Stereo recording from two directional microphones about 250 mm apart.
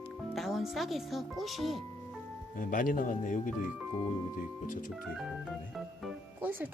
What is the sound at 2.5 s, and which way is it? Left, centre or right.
Speech, left.